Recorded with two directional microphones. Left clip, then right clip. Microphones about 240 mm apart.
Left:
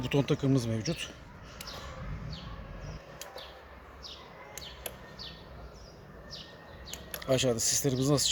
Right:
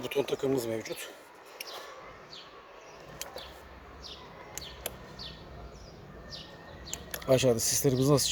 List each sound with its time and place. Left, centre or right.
0.0 s speech: right
7.2 s speech: right